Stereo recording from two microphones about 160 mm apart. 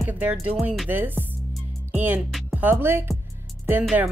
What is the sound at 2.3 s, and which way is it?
Speech, 10° right (ahead or behind).